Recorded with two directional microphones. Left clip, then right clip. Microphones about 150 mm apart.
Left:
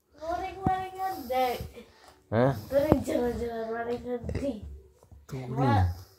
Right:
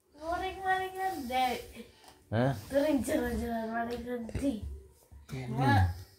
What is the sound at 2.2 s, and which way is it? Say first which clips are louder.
Speech: left 6 dB; 5° left (ahead or behind).